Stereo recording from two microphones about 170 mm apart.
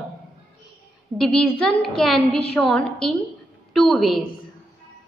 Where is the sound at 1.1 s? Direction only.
Centre (ahead or behind).